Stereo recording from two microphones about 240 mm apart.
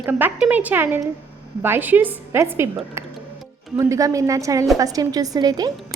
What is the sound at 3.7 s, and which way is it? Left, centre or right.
A woman's voice, centre.